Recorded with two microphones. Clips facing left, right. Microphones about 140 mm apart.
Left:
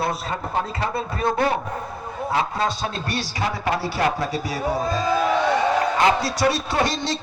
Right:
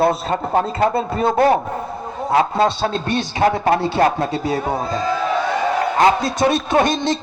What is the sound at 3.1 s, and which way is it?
Speech, 20° right (ahead or behind).